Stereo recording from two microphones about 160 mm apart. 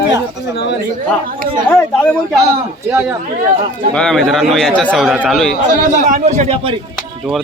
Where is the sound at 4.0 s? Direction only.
5° left (ahead or behind).